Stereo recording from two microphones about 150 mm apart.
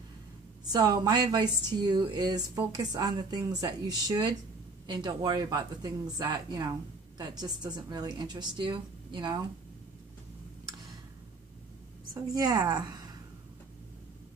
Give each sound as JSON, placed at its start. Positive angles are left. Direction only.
{"t": 0.7, "sound": "speech", "side_deg": -25}
{"t": 12.1, "sound": "a woman's voice", "side_deg": -25}